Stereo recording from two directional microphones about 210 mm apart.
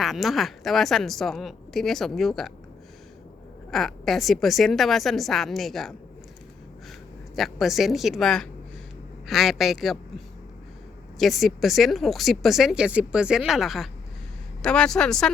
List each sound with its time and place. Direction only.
0.0 s speech: centre (ahead or behind)
3.7 s speech: centre (ahead or behind)
7.3 s speech: centre (ahead or behind)
11.2 s speech: centre (ahead or behind)